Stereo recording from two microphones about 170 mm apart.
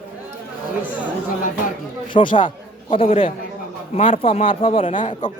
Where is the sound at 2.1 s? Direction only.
30° left (ahead or behind).